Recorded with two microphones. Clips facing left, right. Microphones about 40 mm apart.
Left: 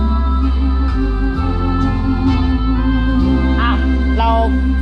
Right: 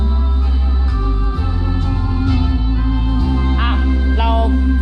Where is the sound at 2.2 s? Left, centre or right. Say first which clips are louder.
Left 3 dB; centre.